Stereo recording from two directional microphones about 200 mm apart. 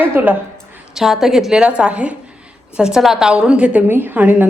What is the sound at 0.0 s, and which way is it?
A woman's voice, 10° right (ahead or behind).